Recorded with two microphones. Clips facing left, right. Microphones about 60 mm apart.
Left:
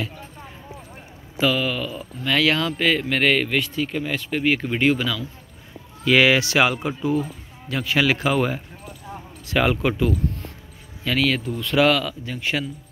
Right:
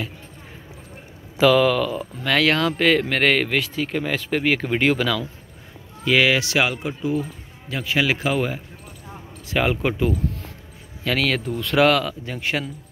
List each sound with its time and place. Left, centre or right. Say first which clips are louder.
1.4 s speech: right 6 dB; right
2.0 s speech: right 1 dB; right
6.0 s speech: left 2 dB; centre
7.7 s speech: left 1 dB; centre
9.5 s speech: left 1 dB; centre
11.1 s speech: even; right